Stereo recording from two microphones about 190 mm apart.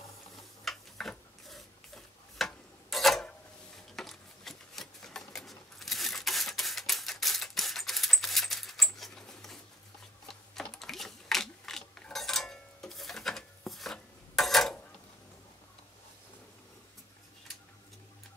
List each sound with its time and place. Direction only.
0.7 s stir: centre (ahead or behind)
10.2 s mechanisms: centre (ahead or behind)